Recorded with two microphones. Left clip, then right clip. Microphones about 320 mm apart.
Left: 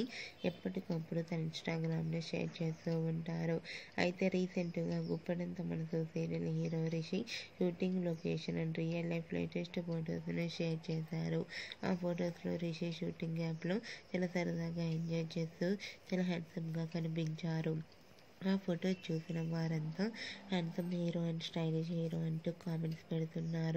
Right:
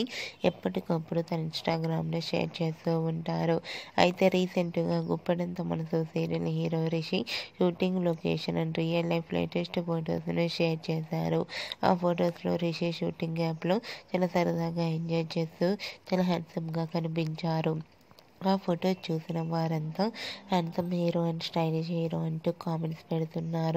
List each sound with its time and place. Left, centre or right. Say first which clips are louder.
0.0 s speech: right 11 dB; right